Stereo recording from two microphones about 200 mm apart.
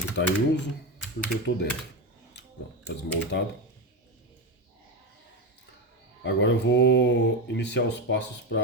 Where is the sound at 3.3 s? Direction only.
60° left (ahead or behind).